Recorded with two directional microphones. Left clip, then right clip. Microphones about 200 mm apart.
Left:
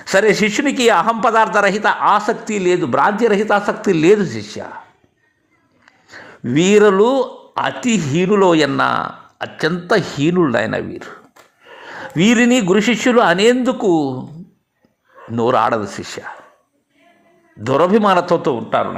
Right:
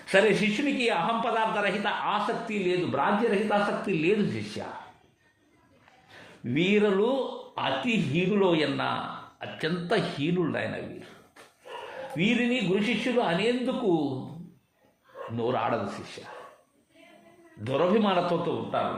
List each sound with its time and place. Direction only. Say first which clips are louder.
0.0 s a man's voice: left 9 dB; 35° left (ahead or behind)
6.1 s a man's voice: left 12 dB; 40° left (ahead or behind)
12.1 s a man's voice: left 13 dB; 45° left (ahead or behind)
15.4 s a man's voice: left 13 dB; 40° left (ahead or behind)
17.6 s a man's voice: left 11 dB; 40° left (ahead or behind)